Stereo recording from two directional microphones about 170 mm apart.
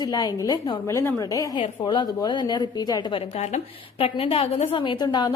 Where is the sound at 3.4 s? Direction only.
35° left (ahead or behind).